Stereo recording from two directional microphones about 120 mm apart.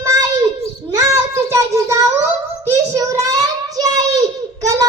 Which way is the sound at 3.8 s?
30° right (ahead or behind).